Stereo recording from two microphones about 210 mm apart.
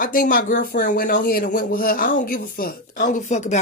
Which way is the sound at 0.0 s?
40° left (ahead or behind).